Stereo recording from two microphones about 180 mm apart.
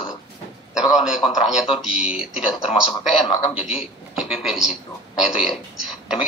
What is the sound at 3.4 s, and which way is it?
Speech, 30° left (ahead or behind).